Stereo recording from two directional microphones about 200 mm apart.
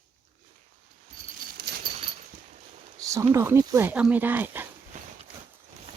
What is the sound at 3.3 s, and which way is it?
Speech, 15° right (ahead or behind).